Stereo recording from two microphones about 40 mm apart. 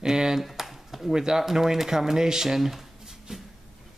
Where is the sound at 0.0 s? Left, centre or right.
Centre.